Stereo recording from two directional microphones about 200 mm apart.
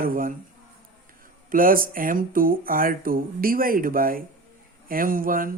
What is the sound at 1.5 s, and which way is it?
Speech, 45° right (ahead or behind).